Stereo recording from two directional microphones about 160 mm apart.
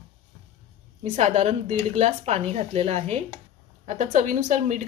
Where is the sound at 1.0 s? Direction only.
45° right (ahead or behind).